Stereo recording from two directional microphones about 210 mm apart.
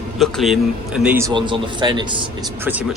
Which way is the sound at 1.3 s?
20° right (ahead or behind).